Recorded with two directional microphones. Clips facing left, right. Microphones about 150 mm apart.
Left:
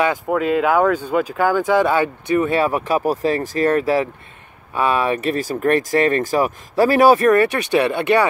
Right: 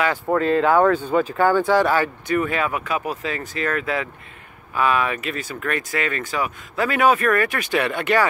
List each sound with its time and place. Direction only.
0.3 s speech: 10° left (ahead or behind); by 7.2 s 35° left (ahead or behind)
7.2 s speech: 25° left (ahead or behind)